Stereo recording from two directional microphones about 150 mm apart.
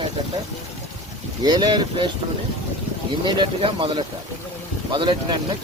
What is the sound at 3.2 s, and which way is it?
A man's voice, 35° right (ahead or behind).